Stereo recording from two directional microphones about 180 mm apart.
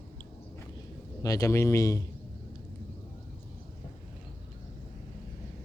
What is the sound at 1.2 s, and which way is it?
Speech, 20° left (ahead or behind).